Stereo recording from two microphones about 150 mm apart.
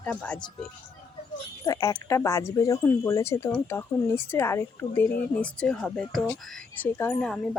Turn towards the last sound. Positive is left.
turn(degrees=5)  # may be behind; listen again after turning